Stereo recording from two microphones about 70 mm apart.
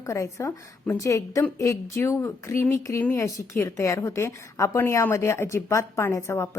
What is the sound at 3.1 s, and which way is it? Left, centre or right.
A woman's voice, left.